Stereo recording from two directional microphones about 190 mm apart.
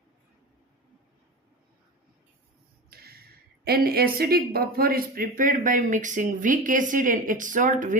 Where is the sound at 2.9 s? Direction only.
55° right (ahead or behind).